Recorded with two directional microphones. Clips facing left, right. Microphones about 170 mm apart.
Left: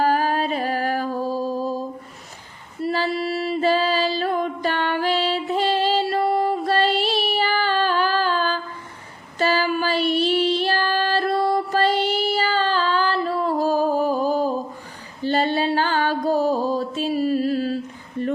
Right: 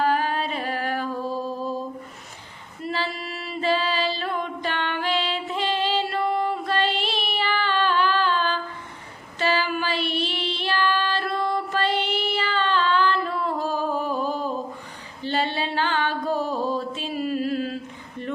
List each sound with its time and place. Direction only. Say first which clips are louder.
0.0 s music: left 3 dB; 40° left (ahead or behind)
2.8 s female singing: left 7 dB; 40° left (ahead or behind)
15.2 s music: left 5 dB; 40° left (ahead or behind)
18.2 s a sound: left 7 dB; 40° left (ahead or behind)